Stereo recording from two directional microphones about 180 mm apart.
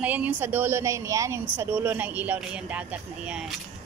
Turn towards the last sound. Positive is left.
turn(degrees=-5)  # may be behind; listen again after turning